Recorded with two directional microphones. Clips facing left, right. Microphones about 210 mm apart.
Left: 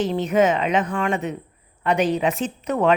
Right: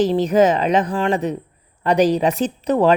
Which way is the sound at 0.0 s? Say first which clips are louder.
Right 4 dB; 35° right (ahead or behind).